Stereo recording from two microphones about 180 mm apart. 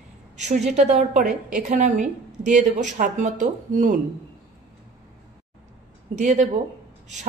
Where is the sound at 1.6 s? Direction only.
40° right (ahead or behind).